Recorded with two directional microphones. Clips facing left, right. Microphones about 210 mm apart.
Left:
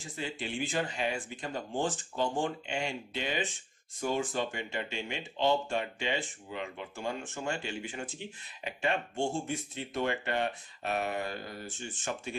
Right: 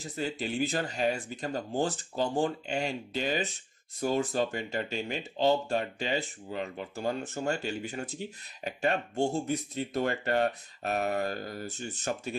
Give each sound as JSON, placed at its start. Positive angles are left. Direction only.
{"t": 0.0, "sound": "speech", "side_deg": -40}